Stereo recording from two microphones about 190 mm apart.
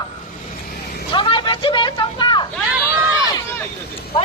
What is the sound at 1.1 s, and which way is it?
Vehicle, 25° left (ahead or behind).